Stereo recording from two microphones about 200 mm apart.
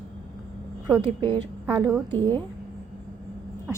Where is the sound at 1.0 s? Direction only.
25° right (ahead or behind).